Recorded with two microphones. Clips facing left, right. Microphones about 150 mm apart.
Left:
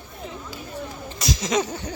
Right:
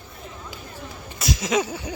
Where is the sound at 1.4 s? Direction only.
5° right (ahead or behind).